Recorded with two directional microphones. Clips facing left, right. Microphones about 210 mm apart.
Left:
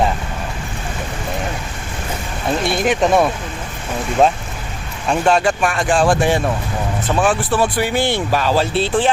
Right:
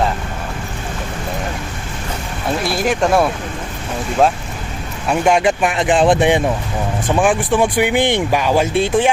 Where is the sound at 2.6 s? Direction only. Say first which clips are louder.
Left 1 dB; centre (ahead or behind).